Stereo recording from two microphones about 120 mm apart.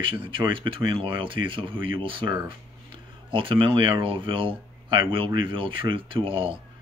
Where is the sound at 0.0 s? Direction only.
45° right (ahead or behind).